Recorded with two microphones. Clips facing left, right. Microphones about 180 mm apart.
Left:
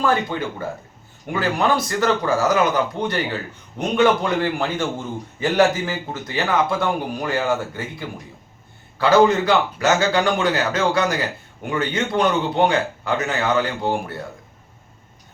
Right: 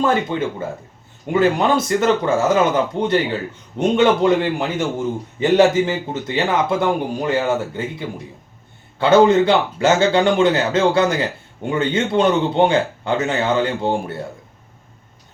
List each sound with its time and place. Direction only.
0.0 s a man's voice: 20° right (ahead or behind)